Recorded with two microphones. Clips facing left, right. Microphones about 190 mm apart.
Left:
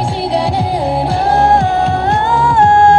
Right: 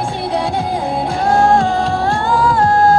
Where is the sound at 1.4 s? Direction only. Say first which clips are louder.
Left 1 dB; 20° left (ahead or behind).